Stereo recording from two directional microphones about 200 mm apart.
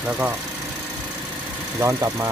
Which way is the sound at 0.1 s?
10° right (ahead or behind).